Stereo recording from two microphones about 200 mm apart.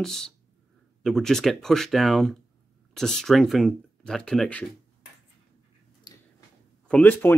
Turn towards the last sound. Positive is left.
turn(degrees=10)  # may be behind; listen again after turning